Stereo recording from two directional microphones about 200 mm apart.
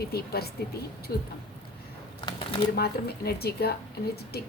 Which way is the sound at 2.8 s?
50° left (ahead or behind).